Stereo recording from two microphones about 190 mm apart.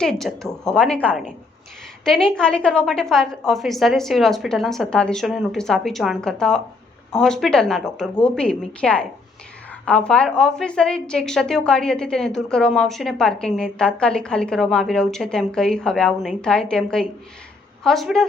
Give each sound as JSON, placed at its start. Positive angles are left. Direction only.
{"t": 0.0, "sound": "a woman's voice", "side_deg": 0}